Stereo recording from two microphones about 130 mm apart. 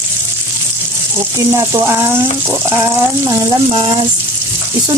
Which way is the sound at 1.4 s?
25° right (ahead or behind).